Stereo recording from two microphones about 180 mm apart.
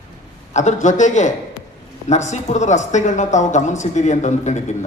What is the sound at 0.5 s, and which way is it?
Speech, 40° left (ahead or behind).